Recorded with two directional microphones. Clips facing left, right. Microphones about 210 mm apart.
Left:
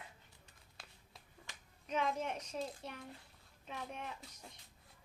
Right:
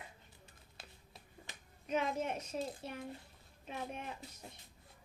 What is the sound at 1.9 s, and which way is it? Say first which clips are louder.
Speech: right 2 dB; 45° right (ahead or behind).